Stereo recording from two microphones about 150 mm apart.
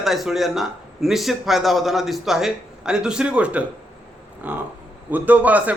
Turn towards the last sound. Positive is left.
turn(degrees=-10)  # may be behind; listen again after turning